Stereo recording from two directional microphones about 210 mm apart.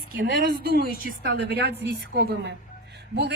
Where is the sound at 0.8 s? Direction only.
40° left (ahead or behind).